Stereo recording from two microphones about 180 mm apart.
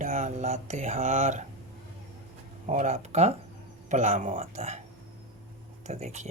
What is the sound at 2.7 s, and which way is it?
Speech, 40° right (ahead or behind).